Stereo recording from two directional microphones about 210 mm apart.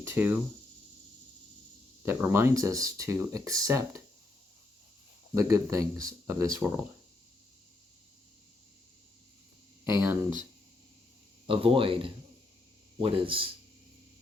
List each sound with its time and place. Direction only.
0.0 s a sound: 10° right (ahead or behind)
2.0 s speech: 10° right (ahead or behind)
5.3 s speech: 15° right (ahead or behind)
9.8 s speech: 10° right (ahead or behind)
11.4 s speech: 25° right (ahead or behind)